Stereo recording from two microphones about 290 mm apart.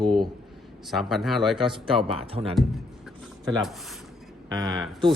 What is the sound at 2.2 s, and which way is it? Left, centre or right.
Speech, centre.